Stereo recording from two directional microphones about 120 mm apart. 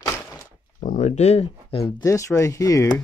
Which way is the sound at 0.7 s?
90° left.